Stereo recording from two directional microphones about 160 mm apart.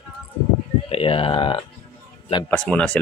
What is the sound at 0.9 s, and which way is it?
Speech, 35° left (ahead or behind).